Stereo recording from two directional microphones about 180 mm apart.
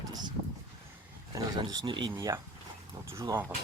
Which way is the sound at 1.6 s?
25° right (ahead or behind).